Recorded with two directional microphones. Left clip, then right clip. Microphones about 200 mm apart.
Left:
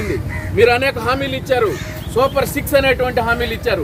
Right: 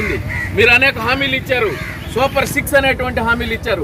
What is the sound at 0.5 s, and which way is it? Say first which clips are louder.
Speech: right 2 dB; 15° left (ahead or behind).